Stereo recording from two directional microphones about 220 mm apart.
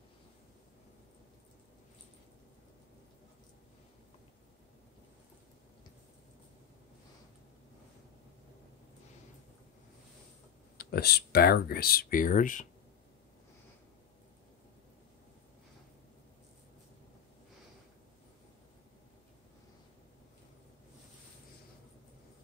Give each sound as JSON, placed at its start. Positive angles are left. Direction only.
{"t": 10.8, "sound": "speech", "side_deg": 45}